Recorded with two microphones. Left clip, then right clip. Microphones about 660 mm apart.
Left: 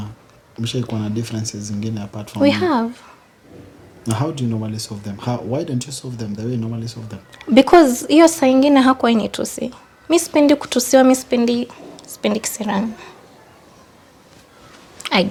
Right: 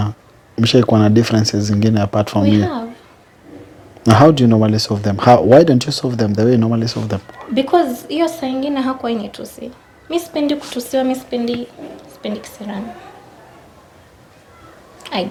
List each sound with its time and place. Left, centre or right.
0.5 s speech: right
2.4 s a woman's voice: left
4.0 s speech: right
7.3 s a woman's voice: left
15.0 s chewing: left